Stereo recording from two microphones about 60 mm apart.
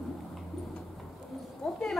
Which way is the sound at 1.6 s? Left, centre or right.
Centre.